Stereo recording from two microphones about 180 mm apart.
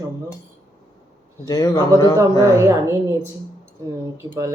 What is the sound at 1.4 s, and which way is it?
Speech, 20° left (ahead or behind).